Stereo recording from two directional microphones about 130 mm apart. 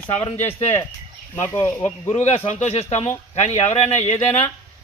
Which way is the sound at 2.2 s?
55° left (ahead or behind).